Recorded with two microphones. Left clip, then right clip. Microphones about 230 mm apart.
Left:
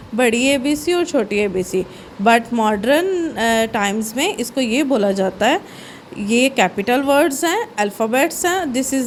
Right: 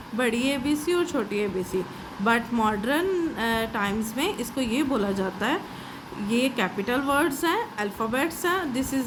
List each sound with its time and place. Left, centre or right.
0.2 s a woman's voice: left